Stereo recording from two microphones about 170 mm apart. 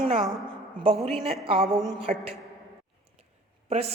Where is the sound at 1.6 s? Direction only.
Centre (ahead or behind).